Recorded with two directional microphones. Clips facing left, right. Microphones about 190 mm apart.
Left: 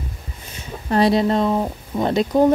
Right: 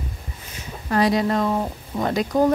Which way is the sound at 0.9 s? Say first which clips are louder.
Left 3 dB; 30° left (ahead or behind).